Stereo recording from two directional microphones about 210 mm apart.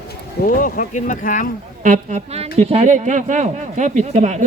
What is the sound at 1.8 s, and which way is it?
Speech, 35° right (ahead or behind).